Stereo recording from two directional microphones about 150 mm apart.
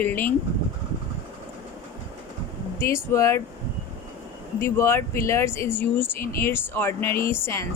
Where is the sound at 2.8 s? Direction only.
20° left (ahead or behind).